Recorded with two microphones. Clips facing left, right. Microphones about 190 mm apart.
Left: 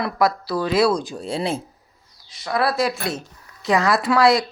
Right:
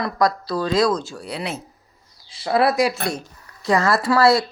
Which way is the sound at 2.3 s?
25° right (ahead or behind).